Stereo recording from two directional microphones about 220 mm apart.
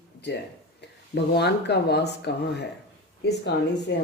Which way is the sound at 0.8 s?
50° left (ahead or behind).